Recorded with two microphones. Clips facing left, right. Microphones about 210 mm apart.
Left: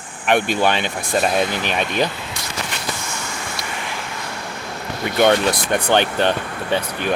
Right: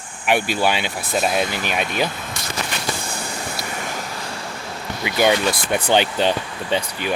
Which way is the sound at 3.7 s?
45° right (ahead or behind).